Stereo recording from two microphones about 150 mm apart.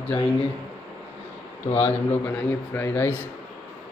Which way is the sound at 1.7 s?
15° left (ahead or behind).